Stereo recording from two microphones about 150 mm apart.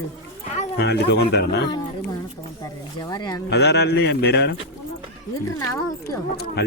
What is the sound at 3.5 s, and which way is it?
A man's voice, 90° left.